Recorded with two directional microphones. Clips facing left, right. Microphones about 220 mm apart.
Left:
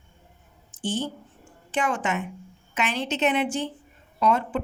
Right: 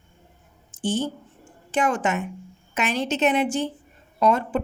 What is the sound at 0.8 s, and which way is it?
A woman's voice, 45° right (ahead or behind).